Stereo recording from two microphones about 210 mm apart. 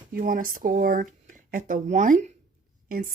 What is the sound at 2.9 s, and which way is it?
Speech, 40° right (ahead or behind).